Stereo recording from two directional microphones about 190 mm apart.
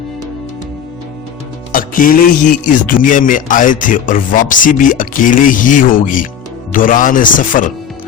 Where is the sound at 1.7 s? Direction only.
45° left (ahead or behind).